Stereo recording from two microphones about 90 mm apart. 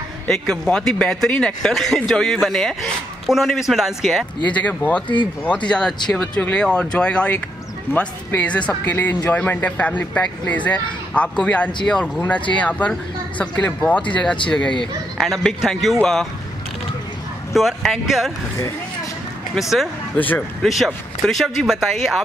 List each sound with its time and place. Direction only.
0.3 s speech: 10° left (ahead or behind)
4.5 s speech: 15° left (ahead or behind)
7.9 s speech: 25° left (ahead or behind)
8.4 s speech: 15° left (ahead or behind)
17.6 s speech: centre (ahead or behind)
20.2 s speech: 20° left (ahead or behind)
20.6 s speech: centre (ahead or behind)